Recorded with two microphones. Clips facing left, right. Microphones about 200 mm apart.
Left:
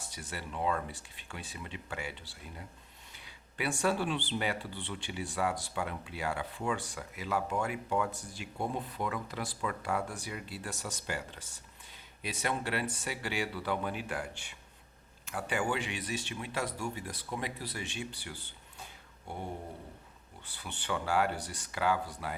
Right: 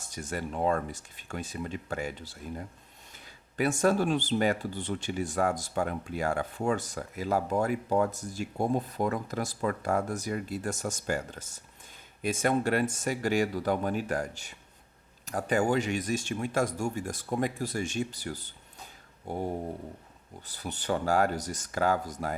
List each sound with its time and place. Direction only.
0.0 s speech: 45° right (ahead or behind)
19.3 s a sound: 40° right (ahead or behind)
20.5 s speech: 40° right (ahead or behind)